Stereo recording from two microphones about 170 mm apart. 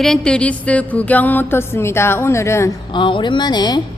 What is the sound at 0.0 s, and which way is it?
A woman's voice, 5° left (ahead or behind).